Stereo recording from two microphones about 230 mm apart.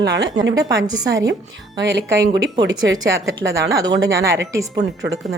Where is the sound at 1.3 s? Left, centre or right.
Right.